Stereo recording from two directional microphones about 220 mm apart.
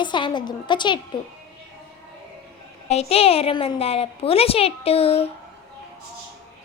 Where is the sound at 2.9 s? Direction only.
30° left (ahead or behind).